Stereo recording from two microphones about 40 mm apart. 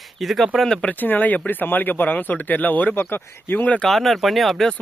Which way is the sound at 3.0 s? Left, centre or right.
Left.